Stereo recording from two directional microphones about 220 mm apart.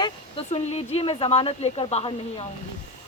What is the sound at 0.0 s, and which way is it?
Speech, 25° left (ahead or behind).